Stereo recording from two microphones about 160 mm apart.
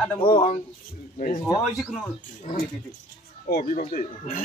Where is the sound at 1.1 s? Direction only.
55° left (ahead or behind).